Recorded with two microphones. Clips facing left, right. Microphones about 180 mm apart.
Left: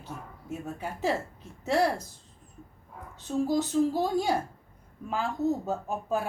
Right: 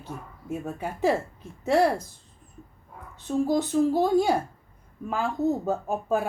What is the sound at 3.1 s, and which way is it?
Speech, 55° right (ahead or behind).